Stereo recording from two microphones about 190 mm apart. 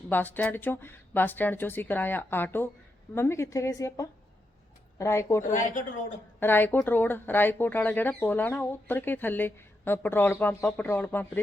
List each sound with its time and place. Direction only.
0.1 s speech: 10° left (ahead or behind)
5.5 s a woman's voice: 45° left (ahead or behind)
6.4 s speech: 10° left (ahead or behind)